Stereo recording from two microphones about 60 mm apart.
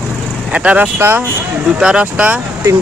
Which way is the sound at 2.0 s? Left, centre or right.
Right.